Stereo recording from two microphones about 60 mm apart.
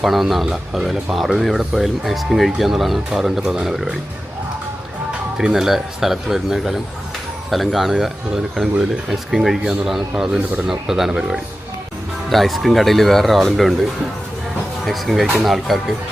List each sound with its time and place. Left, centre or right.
0.0 s speech: centre
5.4 s speech: centre
14.8 s speech: centre